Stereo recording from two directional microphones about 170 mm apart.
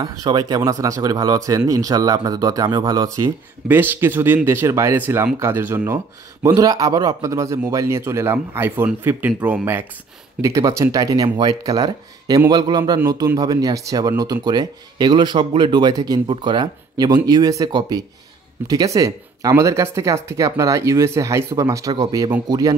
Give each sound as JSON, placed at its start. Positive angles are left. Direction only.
{"t": 0.0, "sound": "speech", "side_deg": -20}